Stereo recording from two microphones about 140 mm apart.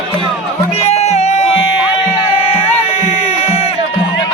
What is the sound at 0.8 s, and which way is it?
Music, 50° left (ahead or behind).